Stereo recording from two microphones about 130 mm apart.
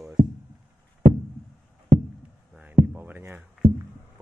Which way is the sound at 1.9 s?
65° right (ahead or behind).